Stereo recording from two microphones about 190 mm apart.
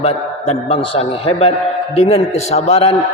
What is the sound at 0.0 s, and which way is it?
A man's voice, 30° left (ahead or behind).